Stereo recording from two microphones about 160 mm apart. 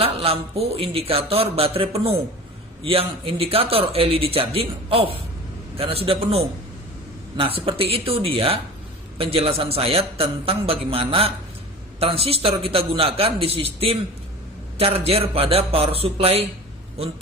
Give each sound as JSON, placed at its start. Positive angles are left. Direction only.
{"t": 0.0, "sound": "speech", "side_deg": -35}